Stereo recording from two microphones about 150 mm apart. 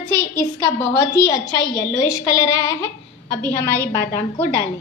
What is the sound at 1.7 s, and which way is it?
A woman's voice, 20° left (ahead or behind).